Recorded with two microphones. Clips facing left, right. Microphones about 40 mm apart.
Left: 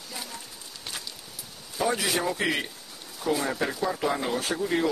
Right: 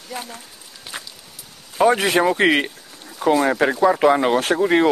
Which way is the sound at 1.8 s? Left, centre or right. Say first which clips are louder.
Right 10 dB; right.